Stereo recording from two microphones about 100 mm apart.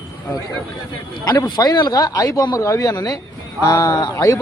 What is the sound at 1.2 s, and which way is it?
A man's voice, 40° left (ahead or behind).